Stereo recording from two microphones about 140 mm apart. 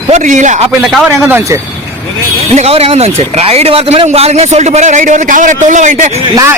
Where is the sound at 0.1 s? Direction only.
60° right (ahead or behind).